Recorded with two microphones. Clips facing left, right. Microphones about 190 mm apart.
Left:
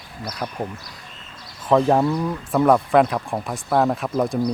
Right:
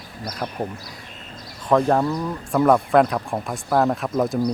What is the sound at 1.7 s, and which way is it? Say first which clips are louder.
Speech: left 1 dB; 10° left (ahead or behind).